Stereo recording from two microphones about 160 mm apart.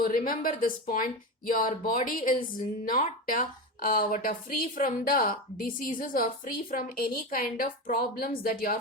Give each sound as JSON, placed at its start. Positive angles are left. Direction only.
{"t": 0.0, "sound": "speech", "side_deg": 60}